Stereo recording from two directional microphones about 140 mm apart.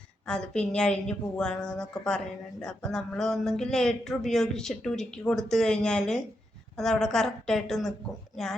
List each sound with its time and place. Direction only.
0.3 s speech: 5° left (ahead or behind)